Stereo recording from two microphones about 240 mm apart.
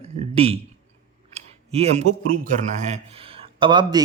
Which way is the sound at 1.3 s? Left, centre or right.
Right.